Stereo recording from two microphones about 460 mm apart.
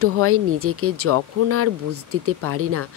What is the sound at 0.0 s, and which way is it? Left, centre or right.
Speech, right.